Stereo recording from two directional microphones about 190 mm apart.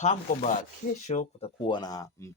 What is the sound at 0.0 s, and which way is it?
Speech, 40° left (ahead or behind).